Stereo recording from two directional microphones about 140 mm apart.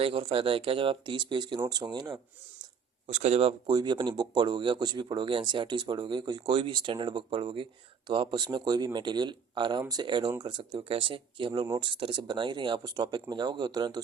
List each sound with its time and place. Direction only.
0.0 s speech: 40° right (ahead or behind)
3.1 s speech: 50° right (ahead or behind)
3.7 s speech: 30° right (ahead or behind)